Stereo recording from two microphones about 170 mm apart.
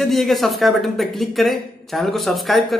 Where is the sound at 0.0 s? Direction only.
Centre (ahead or behind).